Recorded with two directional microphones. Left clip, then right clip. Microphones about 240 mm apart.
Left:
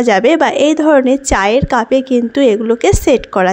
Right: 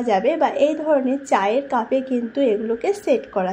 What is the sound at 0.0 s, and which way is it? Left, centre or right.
A woman's voice, left.